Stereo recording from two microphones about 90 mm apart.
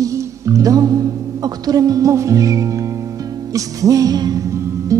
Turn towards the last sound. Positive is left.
turn(degrees=-35)  # may be behind; listen again after turning